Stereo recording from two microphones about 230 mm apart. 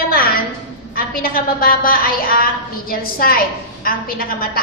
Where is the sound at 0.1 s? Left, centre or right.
Left.